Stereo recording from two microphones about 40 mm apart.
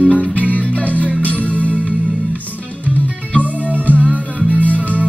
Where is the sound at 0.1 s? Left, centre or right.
Right.